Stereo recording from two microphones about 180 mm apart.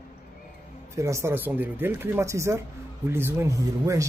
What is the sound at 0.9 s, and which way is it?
Speech, 15° right (ahead or behind).